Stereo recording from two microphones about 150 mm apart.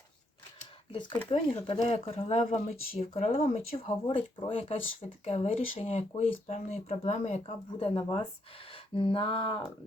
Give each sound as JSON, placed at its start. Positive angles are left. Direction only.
{"t": 1.3, "sound": "speech", "side_deg": 40}